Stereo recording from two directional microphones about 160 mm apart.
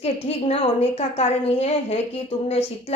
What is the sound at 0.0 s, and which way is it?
A woman's voice, 40° left (ahead or behind).